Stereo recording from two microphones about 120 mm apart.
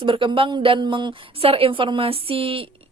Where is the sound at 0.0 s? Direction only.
45° right (ahead or behind).